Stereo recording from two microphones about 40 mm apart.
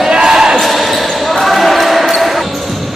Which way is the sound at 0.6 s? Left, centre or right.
Centre.